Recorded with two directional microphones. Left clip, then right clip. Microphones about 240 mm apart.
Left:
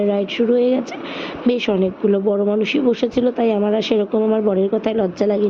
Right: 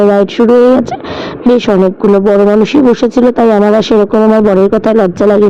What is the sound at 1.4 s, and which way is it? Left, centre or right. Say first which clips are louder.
A man's voice: right 10 dB; right.